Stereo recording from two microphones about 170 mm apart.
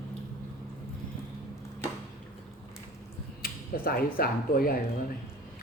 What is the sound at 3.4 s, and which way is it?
Speech, 60° left (ahead or behind).